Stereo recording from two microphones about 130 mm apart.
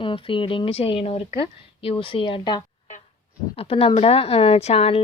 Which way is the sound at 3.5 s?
50° left (ahead or behind).